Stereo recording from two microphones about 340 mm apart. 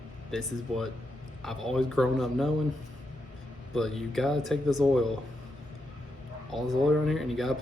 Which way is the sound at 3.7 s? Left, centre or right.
Centre.